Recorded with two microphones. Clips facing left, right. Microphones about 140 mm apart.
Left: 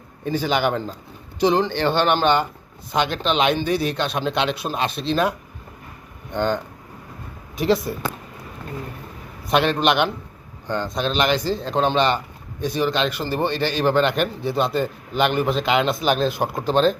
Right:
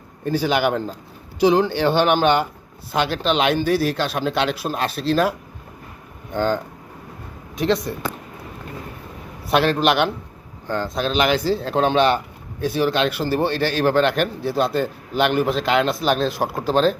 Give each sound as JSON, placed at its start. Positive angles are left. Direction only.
{"t": 0.3, "sound": "speech", "side_deg": -5}
{"t": 6.3, "sound": "speech", "side_deg": -5}
{"t": 9.5, "sound": "speech", "side_deg": 0}